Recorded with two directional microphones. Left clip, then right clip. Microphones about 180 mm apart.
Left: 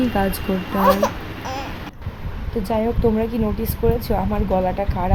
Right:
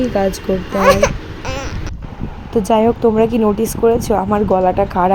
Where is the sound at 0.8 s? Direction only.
55° right (ahead or behind).